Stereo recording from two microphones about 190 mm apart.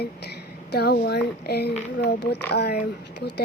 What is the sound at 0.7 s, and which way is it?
Speech, 60° left (ahead or behind).